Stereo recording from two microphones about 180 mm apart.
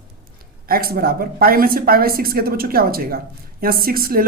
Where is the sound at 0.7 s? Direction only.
55° right (ahead or behind).